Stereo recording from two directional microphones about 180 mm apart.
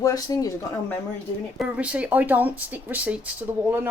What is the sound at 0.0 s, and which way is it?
Speech, 20° left (ahead or behind).